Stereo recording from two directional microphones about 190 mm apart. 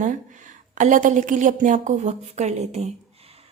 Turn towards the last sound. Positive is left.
turn(degrees=-30)  # may be behind; listen again after turning